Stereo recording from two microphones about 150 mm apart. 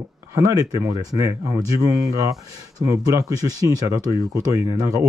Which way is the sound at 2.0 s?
20° right (ahead or behind).